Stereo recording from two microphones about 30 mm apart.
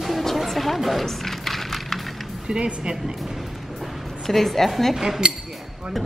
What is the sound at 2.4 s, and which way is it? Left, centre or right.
Speech, right.